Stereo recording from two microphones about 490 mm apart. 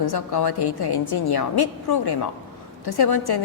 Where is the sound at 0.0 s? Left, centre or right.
Left.